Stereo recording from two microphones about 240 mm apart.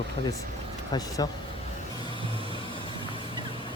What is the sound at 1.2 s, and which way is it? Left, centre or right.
Speech, centre.